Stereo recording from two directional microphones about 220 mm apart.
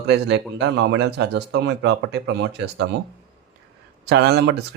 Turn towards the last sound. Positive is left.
turn(degrees=-50)  # may be behind; listen again after turning